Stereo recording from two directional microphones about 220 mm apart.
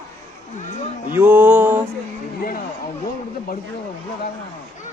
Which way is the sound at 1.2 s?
10° right (ahead or behind).